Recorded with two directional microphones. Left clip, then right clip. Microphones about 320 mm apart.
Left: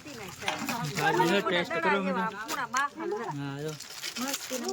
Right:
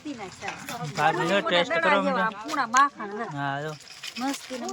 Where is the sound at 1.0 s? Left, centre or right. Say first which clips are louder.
Right 2 dB; centre.